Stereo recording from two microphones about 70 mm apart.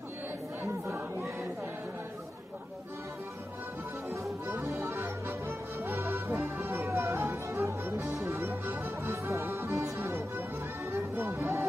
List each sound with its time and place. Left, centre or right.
0.8 s choir: right
4.1 s music: right
8.5 s music: right
9.1 s music: right
10.0 s music: right